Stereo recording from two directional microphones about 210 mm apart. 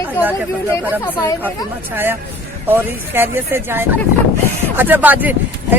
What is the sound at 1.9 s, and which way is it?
Speech, 10° right (ahead or behind).